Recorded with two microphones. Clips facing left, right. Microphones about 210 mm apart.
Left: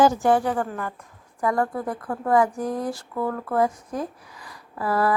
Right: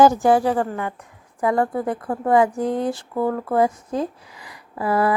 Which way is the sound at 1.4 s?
25° right (ahead or behind).